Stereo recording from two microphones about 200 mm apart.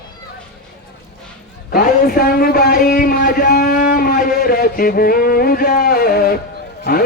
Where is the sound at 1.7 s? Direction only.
45° left (ahead or behind).